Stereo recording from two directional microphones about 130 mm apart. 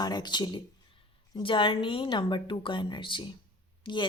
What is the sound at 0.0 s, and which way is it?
Speech, 30° left (ahead or behind).